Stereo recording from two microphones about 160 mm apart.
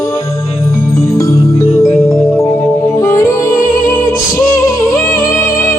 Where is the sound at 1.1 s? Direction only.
20° left (ahead or behind).